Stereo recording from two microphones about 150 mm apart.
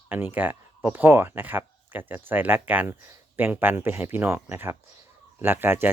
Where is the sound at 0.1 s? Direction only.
10° right (ahead or behind).